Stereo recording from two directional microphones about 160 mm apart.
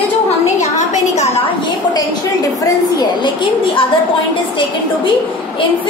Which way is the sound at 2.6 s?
25° left (ahead or behind).